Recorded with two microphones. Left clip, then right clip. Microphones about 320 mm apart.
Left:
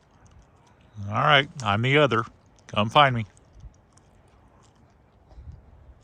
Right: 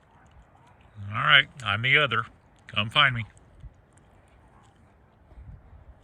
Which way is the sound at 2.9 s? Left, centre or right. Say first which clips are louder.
Left 3 dB; centre.